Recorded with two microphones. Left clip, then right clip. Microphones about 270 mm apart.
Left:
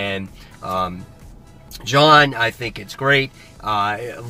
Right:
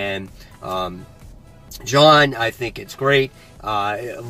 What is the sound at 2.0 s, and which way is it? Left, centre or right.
Speech, centre.